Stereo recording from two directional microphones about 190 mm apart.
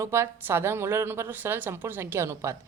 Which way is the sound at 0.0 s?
15° right (ahead or behind).